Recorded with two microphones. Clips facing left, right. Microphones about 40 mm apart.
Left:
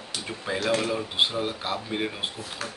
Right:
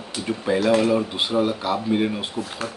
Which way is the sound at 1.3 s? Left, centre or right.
Right.